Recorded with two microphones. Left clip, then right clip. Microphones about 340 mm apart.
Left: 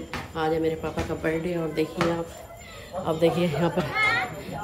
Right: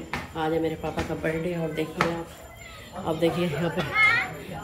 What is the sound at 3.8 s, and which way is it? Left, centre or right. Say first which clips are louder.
Speech: right 5 dB; left.